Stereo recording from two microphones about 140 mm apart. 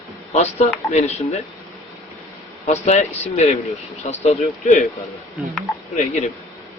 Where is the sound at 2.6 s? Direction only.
50° left (ahead or behind).